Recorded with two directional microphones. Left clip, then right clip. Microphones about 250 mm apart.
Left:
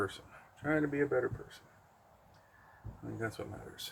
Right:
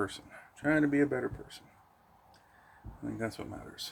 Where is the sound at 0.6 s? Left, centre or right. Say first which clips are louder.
Right 4 dB; right.